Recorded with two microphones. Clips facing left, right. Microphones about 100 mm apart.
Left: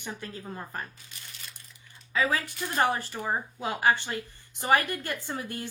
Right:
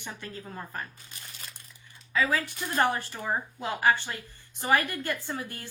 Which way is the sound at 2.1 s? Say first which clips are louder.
Even; 25° left (ahead or behind).